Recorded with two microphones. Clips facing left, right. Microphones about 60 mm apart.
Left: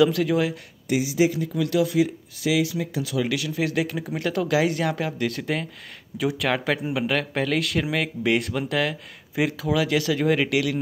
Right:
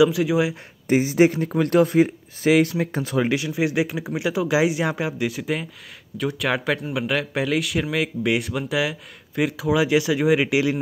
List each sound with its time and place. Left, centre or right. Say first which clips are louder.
0.0 s speech: right 2 dB; centre
0.8 s speech: right 4 dB; right; by 5.1 s centre
5.2 s speech: right 1 dB; centre
9.7 s speech: right 5 dB; centre